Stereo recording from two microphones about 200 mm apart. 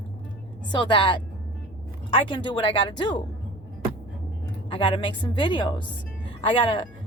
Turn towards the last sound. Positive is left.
turn(degrees=25)  # may be behind; listen again after turning